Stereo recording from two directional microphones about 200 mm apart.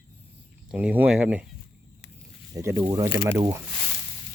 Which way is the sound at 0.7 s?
10° right (ahead or behind).